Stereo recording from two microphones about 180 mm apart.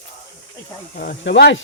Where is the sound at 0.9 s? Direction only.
60° left (ahead or behind); by 1.6 s 75° left (ahead or behind).